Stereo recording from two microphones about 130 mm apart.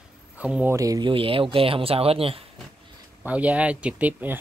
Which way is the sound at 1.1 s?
45° right (ahead or behind).